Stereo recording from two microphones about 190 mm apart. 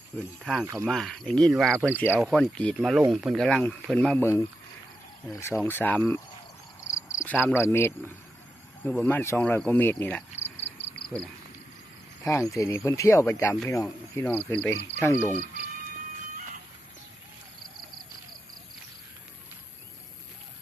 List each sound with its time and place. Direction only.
0.4 s speech: centre (ahead or behind)
5.6 s speech: 10° left (ahead or behind)
6.9 s cricket: 15° left (ahead or behind)
7.4 s speech: 10° left (ahead or behind)
10.6 s cricket: 65° left (ahead or behind)
12.2 s speech: 15° left (ahead or behind)